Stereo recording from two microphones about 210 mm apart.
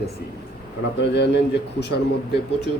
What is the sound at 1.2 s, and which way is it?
Speech, 55° left (ahead or behind).